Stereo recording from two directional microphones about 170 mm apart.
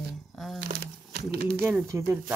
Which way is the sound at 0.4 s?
Centre (ahead or behind).